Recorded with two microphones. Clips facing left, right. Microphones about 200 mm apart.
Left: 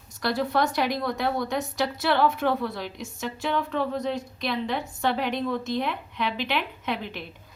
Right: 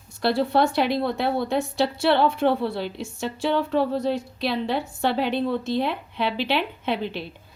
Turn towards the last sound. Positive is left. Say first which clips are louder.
# right 5 dB
turn(degrees=-30)  # may be behind; listen again after turning